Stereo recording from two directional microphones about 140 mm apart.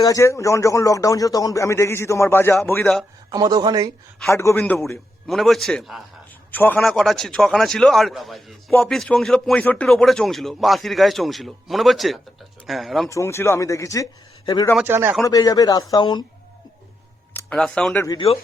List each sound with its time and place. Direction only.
0.0 s a man's voice: 20° left (ahead or behind)
3.3 s speech: 25° right (ahead or behind)
4.3 s a man's voice: 20° left (ahead or behind)
5.3 s speech: centre (ahead or behind)
6.5 s speech: 15° left (ahead or behind)
13.1 s speech: 20° left (ahead or behind)
14.8 s a man's voice: 15° right (ahead or behind)
15.2 s speech: 25° left (ahead or behind)
17.5 s speech: 5° left (ahead or behind)